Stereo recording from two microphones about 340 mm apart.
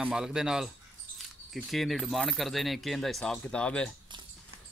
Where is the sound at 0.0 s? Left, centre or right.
Centre.